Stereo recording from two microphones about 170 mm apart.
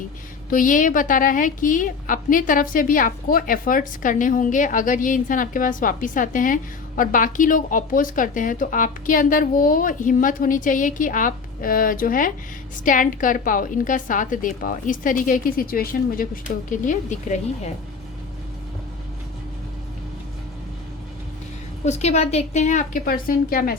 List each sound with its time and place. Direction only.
0.5 s a woman's voice: 50° left (ahead or behind)
21.8 s a woman's voice: 40° left (ahead or behind); by 23.7 s 60° left (ahead or behind)